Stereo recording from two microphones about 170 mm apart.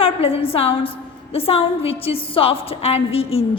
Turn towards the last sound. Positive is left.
turn(degrees=35)  # may be behind; listen again after turning